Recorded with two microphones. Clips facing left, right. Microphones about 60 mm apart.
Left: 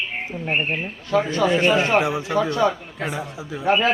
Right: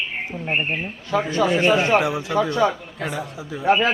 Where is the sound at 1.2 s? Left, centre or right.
Right.